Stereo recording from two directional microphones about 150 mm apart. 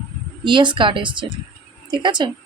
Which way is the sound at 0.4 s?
30° right (ahead or behind).